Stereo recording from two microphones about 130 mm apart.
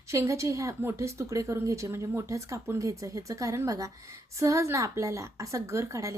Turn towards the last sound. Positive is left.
turn(degrees=-25)  # may be behind; listen again after turning